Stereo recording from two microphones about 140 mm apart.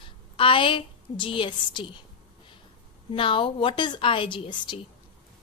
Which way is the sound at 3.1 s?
40° left (ahead or behind).